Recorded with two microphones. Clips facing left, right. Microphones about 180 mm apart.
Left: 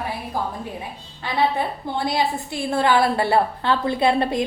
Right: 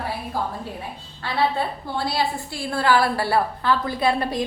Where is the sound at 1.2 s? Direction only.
20° left (ahead or behind).